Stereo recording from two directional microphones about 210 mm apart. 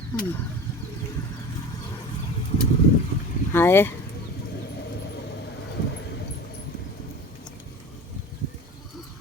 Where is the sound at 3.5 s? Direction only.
10° left (ahead or behind).